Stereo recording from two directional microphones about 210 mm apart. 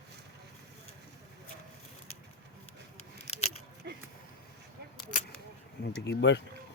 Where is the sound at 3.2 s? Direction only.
30° left (ahead or behind).